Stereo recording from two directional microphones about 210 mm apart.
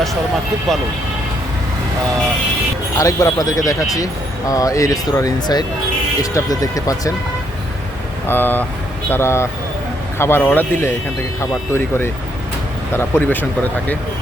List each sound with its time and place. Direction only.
0.7 s speech: centre (ahead or behind)
3.0 s speech: 15° left (ahead or behind)
8.3 s speech: 10° left (ahead or behind)